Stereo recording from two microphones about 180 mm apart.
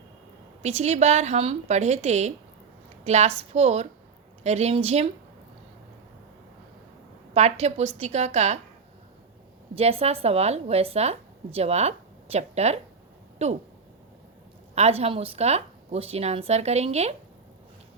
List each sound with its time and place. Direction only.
0.6 s a woman's voice: 40° right (ahead or behind)
7.3 s a woman's voice: 40° right (ahead or behind)
9.7 s a woman's voice: 35° right (ahead or behind)
14.8 s a woman's voice: 35° right (ahead or behind)